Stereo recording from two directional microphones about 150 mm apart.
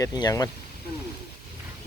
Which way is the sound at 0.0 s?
25° left (ahead or behind).